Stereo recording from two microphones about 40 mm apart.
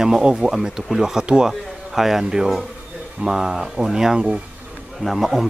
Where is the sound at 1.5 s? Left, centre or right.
Centre.